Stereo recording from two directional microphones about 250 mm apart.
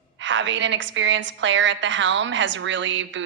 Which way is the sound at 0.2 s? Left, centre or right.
Right.